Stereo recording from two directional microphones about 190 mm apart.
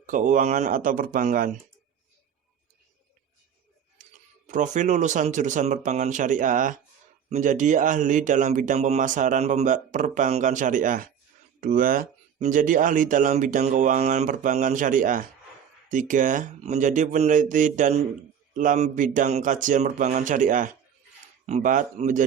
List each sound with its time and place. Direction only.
0.0 s speech: 45° right (ahead or behind)
4.4 s speech: 40° right (ahead or behind)